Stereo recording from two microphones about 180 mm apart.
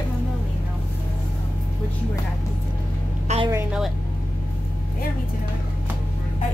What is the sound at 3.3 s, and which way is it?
Goat, 40° right (ahead or behind).